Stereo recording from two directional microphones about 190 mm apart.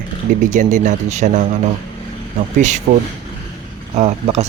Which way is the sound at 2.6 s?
40° right (ahead or behind).